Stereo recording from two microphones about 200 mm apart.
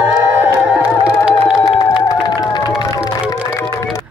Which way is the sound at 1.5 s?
15° left (ahead or behind).